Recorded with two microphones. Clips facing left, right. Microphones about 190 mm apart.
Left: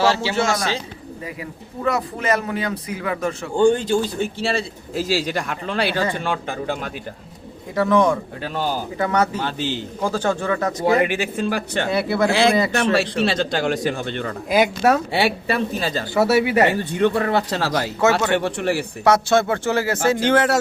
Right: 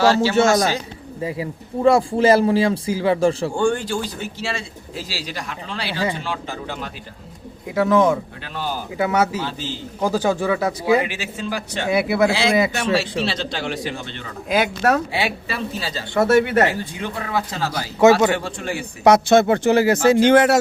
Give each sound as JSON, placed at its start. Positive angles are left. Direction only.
{"t": 0.3, "sound": "speech", "side_deg": -25}
{"t": 3.5, "sound": "speech", "side_deg": 20}
{"t": 4.9, "sound": "speech", "side_deg": 45}
{"t": 7.8, "sound": "a man's voice", "side_deg": -5}
{"t": 9.4, "sound": "speech", "side_deg": 65}
{"t": 10.0, "sound": "a man's voice", "side_deg": -10}
{"t": 11.0, "sound": "speech", "side_deg": 55}
{"t": 11.9, "sound": "a man's voice", "side_deg": -10}
{"t": 12.3, "sound": "speech", "side_deg": 55}
{"t": 14.5, "sound": "speech", "side_deg": 10}
{"t": 15.4, "sound": "speech", "side_deg": 50}
{"t": 16.1, "sound": "speech", "side_deg": 5}
{"t": 16.9, "sound": "speech", "side_deg": 65}
{"t": 19.0, "sound": "a man's voice", "side_deg": -20}